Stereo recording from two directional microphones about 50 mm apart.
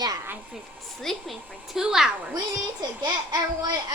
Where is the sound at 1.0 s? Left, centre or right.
Centre.